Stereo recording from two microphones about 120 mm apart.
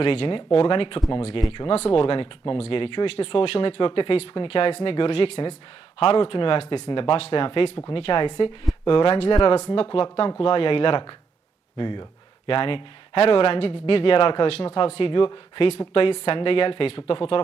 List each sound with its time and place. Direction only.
0.0 s speech: 50° left (ahead or behind)
9.3 s speech: 35° left (ahead or behind)
9.6 s speech: 60° left (ahead or behind)